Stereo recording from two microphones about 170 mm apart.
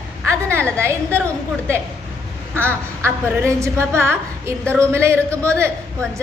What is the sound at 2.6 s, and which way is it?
A man's voice, 15° right (ahead or behind).